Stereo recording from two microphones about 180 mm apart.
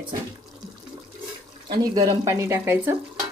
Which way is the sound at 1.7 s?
25° right (ahead or behind).